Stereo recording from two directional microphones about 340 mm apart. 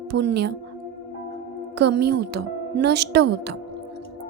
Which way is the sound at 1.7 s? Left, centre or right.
Right.